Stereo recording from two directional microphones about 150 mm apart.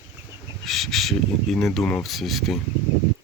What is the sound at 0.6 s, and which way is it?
Speech, centre (ahead or behind).